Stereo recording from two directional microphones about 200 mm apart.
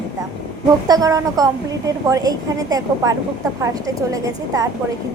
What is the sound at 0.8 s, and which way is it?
A woman's voice, 20° right (ahead or behind).